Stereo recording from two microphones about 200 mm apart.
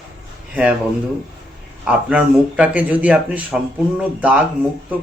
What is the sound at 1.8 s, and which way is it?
A man's voice, 5° right (ahead or behind).